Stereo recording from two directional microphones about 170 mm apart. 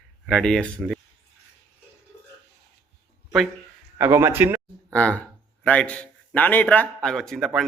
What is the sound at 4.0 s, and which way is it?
Speech, 15° right (ahead or behind).